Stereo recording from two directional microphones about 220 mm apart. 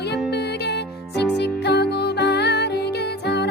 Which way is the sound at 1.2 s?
50° left (ahead or behind).